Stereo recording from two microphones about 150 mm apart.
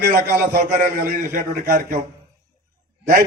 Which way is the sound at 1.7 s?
70° right (ahead or behind).